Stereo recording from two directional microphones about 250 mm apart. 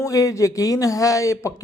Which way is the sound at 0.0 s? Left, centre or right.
Centre.